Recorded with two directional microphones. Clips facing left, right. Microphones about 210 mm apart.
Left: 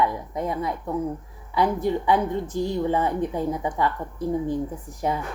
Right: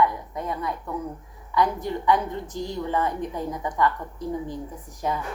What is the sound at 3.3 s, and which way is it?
Speech, 20° left (ahead or behind).